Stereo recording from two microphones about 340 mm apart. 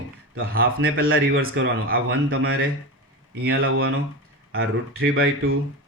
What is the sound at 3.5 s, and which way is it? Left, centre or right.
A man's voice, right.